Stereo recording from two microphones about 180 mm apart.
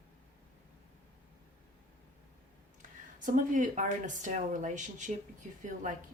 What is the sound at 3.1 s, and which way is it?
Speech, 45° right (ahead or behind).